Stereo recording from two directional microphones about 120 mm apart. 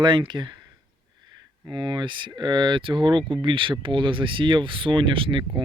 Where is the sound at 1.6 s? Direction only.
40° right (ahead or behind).